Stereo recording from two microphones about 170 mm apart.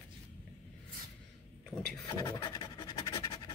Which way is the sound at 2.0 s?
20° left (ahead or behind).